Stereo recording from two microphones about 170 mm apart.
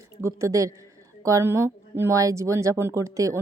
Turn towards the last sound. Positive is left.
turn(degrees=-20)  # may be behind; listen again after turning